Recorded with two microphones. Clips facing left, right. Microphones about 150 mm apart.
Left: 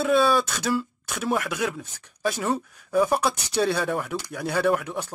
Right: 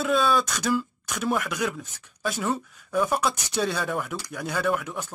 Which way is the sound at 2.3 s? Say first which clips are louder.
Left 1 dB; 10° left (ahead or behind).